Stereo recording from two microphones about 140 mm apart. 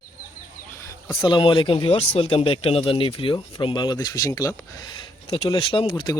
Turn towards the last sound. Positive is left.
turn(degrees=30)  # may be behind; listen again after turning